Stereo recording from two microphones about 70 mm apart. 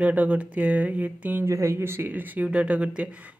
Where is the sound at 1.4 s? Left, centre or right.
Right; by 3.3 s centre.